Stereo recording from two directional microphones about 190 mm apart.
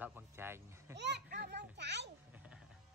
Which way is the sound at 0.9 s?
65° right (ahead or behind).